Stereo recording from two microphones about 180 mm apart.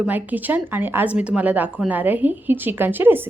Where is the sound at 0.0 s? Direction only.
10° right (ahead or behind).